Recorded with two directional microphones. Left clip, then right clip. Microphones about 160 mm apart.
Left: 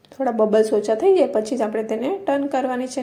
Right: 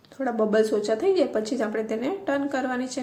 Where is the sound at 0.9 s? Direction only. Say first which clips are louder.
Left 6 dB; 15° left (ahead or behind).